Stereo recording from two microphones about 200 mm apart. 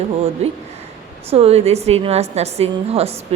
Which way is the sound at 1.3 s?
30° right (ahead or behind).